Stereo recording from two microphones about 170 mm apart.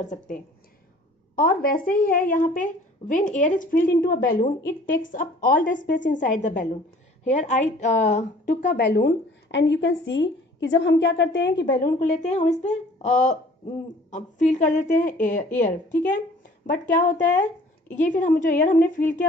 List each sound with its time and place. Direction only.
0.0 s speech: 45° left (ahead or behind)
1.3 s speech: 60° left (ahead or behind)
5.8 s speech: 90° left
6.0 s speech: 50° left (ahead or behind)
8.7 s speech: 85° left
11.8 s speech: 45° left (ahead or behind)